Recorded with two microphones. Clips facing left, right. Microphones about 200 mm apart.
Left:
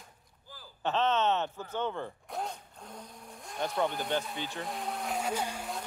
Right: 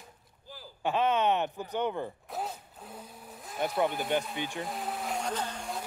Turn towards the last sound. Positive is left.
turn(degrees=5)  # may be behind; listen again after turning